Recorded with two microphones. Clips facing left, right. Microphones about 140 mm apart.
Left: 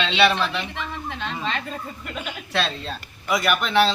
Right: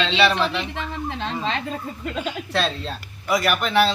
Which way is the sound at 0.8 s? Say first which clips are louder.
Right 3 dB; 30° right (ahead or behind).